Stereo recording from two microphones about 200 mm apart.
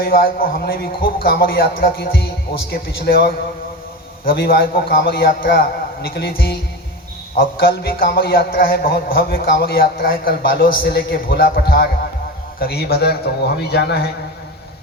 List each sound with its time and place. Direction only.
0.0 s a man's voice: 50° left (ahead or behind)